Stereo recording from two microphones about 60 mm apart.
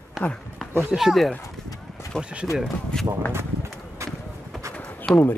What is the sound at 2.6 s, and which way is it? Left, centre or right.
Speech, centre.